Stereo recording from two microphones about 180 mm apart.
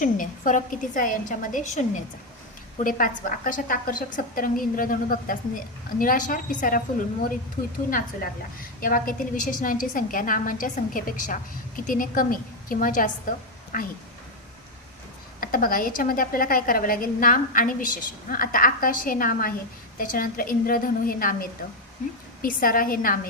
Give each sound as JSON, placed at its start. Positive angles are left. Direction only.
{"t": 0.0, "sound": "a woman's voice", "side_deg": 45}
{"t": 15.4, "sound": "a woman's voice", "side_deg": 50}
{"t": 22.4, "sound": "a woman's voice", "side_deg": 50}